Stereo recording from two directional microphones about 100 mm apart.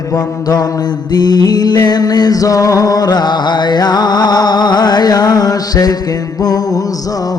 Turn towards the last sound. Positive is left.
turn(degrees=40)  # may be behind; listen again after turning